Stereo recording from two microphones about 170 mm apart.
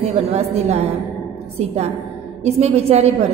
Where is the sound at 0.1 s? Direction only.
35° right (ahead or behind).